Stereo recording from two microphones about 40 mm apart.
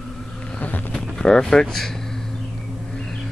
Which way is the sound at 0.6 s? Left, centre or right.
Left.